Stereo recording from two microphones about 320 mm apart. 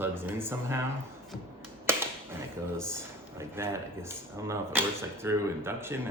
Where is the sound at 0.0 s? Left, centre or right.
Centre.